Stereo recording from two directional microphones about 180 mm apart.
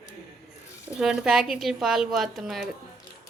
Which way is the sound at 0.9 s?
5° right (ahead or behind).